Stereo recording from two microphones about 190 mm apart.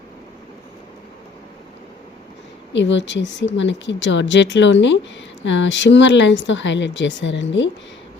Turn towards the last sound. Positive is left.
turn(degrees=70)  # may be behind; listen again after turning